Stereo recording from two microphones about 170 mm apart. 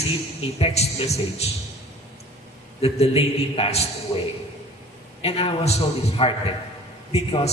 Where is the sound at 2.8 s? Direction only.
35° left (ahead or behind).